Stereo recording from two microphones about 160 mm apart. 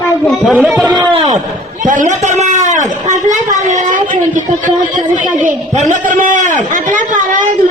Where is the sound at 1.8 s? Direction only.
55° right (ahead or behind).